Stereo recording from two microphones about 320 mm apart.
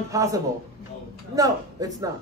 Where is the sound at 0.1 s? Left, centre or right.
Centre.